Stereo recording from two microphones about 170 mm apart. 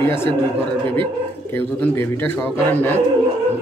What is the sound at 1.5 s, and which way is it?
Speech, 10° left (ahead or behind).